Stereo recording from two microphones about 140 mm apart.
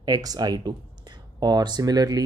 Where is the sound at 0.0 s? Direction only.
25° right (ahead or behind).